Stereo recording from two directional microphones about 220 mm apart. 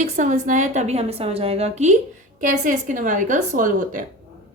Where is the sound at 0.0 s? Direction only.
35° right (ahead or behind).